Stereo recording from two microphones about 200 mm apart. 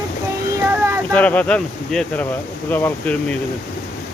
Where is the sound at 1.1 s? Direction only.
5° left (ahead or behind).